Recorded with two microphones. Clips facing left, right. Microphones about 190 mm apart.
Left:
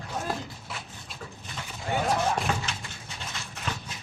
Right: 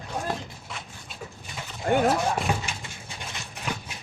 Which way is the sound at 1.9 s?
55° right (ahead or behind).